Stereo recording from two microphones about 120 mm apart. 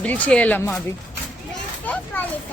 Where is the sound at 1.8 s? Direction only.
15° left (ahead or behind).